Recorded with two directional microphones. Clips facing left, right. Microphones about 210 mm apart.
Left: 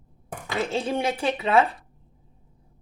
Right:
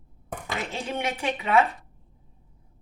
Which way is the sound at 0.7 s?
30° left (ahead or behind).